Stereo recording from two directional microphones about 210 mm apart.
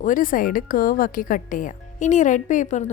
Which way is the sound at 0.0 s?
40° left (ahead or behind).